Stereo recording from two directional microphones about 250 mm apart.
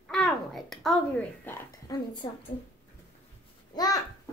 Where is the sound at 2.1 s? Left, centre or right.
Centre.